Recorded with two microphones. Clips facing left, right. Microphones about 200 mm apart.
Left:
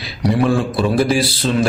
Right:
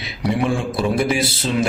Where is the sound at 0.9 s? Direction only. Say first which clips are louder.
Left 4 dB; 25° right (ahead or behind).